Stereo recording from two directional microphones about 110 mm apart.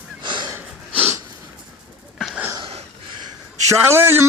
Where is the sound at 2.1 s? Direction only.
Centre (ahead or behind).